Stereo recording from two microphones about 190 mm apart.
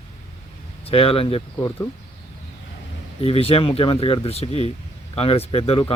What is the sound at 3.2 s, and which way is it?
Speech, 30° left (ahead or behind).